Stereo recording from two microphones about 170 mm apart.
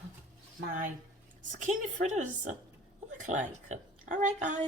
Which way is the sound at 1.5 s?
45° right (ahead or behind).